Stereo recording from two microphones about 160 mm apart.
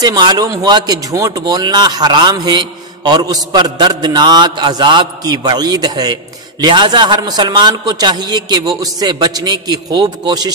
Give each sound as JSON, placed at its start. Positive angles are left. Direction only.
{"t": 0.0, "sound": "speech", "side_deg": -25}